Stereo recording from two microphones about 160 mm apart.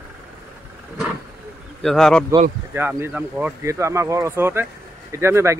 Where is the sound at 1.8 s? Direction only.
Centre (ahead or behind).